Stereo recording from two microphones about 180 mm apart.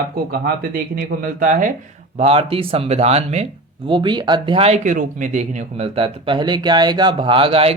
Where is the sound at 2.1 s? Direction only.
35° right (ahead or behind).